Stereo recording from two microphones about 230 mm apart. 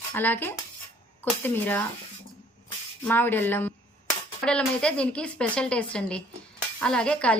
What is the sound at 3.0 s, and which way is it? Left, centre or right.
A woman's voice, centre.